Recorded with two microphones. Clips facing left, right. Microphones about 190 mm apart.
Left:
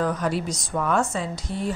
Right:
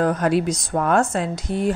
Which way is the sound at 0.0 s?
70° right (ahead or behind).